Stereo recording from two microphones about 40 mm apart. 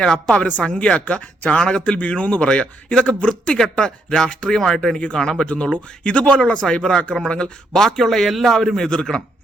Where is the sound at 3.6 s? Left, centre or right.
Left.